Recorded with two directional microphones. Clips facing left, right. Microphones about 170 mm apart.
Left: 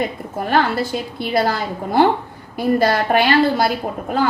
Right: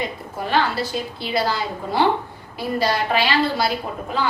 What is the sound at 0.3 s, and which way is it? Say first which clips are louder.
A woman's voice: left 3 dB; 50° left (ahead or behind).